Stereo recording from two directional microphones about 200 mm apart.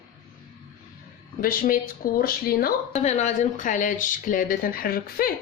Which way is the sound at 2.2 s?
50° left (ahead or behind).